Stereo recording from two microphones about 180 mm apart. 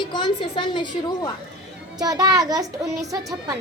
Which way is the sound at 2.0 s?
20° right (ahead or behind).